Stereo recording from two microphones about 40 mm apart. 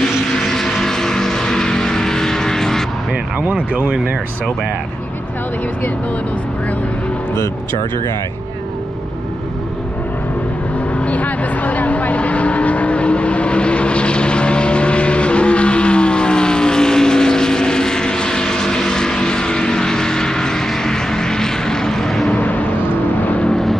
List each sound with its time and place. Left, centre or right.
0.5 s vehicle: centre
3.5 s speech: right
11.0 s vehicle: left; by 22.3 s centre
22.3 s a sound: left
23.2 s vehicle: left
23.5 s vehicle: centre